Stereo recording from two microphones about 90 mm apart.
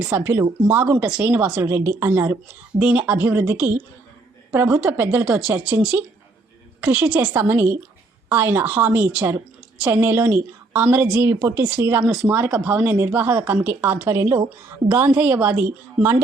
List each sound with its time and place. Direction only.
0.1 s speech: 20° right (ahead or behind)
1.0 s a woman's voice: 10° right (ahead or behind)
1.6 s speech: 25° right (ahead or behind)
2.7 s a woman's voice: 15° right (ahead or behind)